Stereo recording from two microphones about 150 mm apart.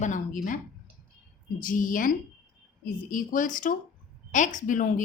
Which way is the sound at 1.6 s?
65° left (ahead or behind).